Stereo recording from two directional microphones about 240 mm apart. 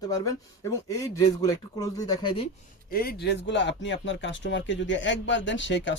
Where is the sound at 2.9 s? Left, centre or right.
Left.